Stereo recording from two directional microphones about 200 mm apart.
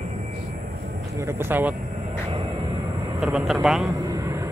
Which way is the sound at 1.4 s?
10° right (ahead or behind).